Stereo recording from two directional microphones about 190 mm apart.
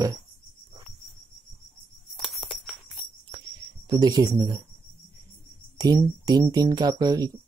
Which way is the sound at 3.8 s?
20° right (ahead or behind).